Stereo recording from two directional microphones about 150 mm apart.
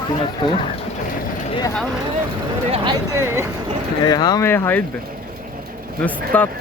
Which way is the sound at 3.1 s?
20° right (ahead or behind).